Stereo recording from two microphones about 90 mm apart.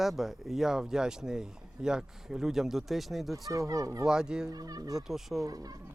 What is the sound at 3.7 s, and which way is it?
Speech, 40° right (ahead or behind).